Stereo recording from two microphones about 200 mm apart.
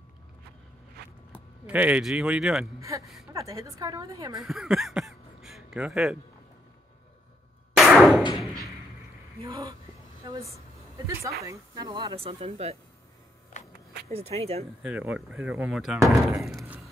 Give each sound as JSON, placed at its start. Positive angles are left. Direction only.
{"t": 1.3, "sound": "speech", "side_deg": -5}
{"t": 2.9, "sound": "a woman's voice", "side_deg": -15}
{"t": 4.4, "sound": "a sound", "side_deg": 0}
{"t": 7.7, "sound": "a sound", "side_deg": 0}
{"t": 9.4, "sound": "a woman's voice", "side_deg": -20}
{"t": 14.0, "sound": "speech", "side_deg": -30}
{"t": 14.8, "sound": "speech", "side_deg": -5}
{"t": 16.4, "sound": "thunk", "side_deg": -5}